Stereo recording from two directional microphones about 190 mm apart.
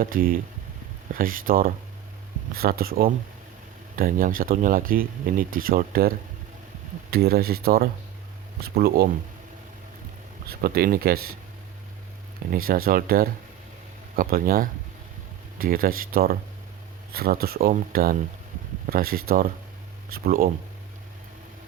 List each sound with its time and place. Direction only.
0.0 s speech: 50° right (ahead or behind)
10.5 s speech: 55° right (ahead or behind)
12.5 s speech: 50° right (ahead or behind)